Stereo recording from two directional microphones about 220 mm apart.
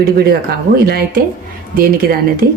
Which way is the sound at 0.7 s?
45° right (ahead or behind).